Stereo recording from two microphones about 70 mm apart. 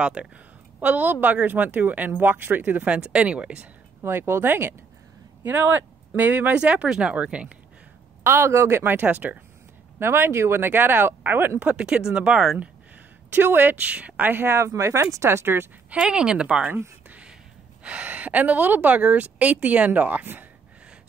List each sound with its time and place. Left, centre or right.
0.0 s speech: centre
0.7 s a woman's voice: right
4.0 s a woman's voice: right; by 7.5 s centre
8.2 s speech: right
9.9 s speech: right
11.7 s speech: centre
13.4 s a woman's voice: right
15.9 s speech: centre
17.8 s a woman's voice: right